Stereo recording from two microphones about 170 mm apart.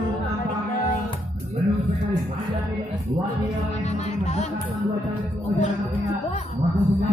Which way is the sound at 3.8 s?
40° left (ahead or behind).